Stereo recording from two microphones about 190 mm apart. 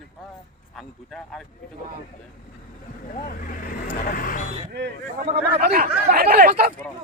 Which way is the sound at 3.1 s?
45° left (ahead or behind).